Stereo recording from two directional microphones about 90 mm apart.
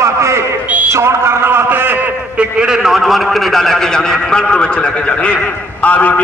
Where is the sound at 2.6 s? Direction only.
10° right (ahead or behind).